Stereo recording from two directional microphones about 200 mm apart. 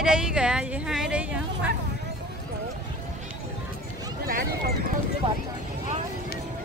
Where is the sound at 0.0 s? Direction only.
5° right (ahead or behind).